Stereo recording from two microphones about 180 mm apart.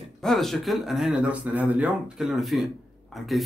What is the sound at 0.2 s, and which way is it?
A man's voice, centre (ahead or behind).